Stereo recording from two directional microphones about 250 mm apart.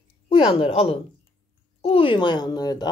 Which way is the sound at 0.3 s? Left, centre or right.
Left.